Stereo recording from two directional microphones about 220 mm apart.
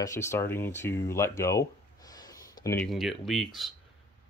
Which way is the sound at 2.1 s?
15° left (ahead or behind).